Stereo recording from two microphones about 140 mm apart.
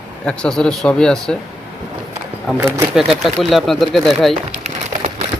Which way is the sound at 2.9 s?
Centre (ahead or behind).